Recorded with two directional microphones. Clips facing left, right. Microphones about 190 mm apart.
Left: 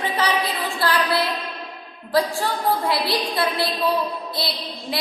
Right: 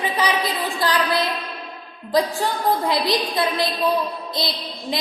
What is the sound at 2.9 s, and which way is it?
A woman's voice, 20° right (ahead or behind).